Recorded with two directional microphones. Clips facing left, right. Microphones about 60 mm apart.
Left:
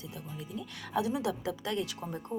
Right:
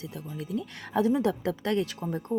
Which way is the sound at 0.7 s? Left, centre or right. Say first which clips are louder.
Right 6 dB; right.